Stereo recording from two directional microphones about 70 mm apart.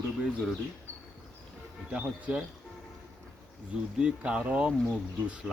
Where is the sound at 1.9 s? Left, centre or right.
Centre.